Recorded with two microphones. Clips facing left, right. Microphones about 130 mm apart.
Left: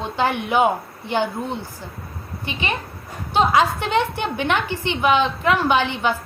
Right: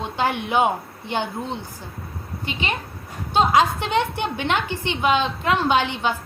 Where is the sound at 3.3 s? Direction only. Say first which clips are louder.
Even; 15° right (ahead or behind).